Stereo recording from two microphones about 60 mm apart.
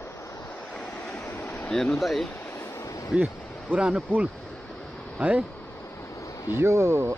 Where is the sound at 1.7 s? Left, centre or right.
Centre.